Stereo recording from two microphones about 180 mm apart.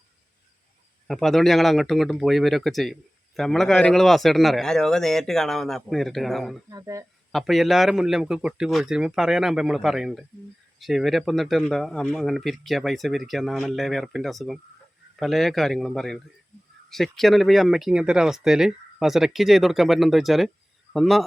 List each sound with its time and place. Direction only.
1.0 s speech: centre (ahead or behind)
6.7 s speech: 20° right (ahead or behind)
7.3 s speech: centre (ahead or behind)